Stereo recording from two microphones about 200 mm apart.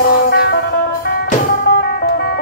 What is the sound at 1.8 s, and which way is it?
Music, 50° left (ahead or behind).